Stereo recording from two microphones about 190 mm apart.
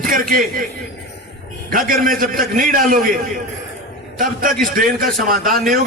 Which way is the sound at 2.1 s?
45° right (ahead or behind).